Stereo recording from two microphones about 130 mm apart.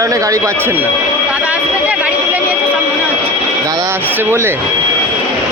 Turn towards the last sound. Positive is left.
turn(degrees=-15)  # may be behind; listen again after turning